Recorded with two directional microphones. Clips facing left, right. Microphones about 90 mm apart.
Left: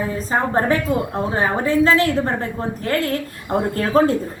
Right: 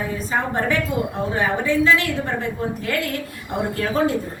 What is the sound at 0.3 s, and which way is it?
A woman's voice, 35° left (ahead or behind).